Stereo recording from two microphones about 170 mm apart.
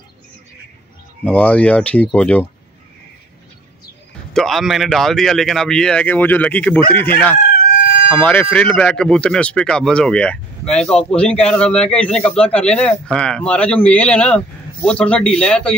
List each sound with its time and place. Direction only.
1.2 s speech: 10° left (ahead or behind)
4.3 s speech: centre (ahead or behind)